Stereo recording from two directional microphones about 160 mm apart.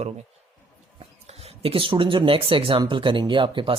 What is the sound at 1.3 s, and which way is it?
Speech, 40° right (ahead or behind).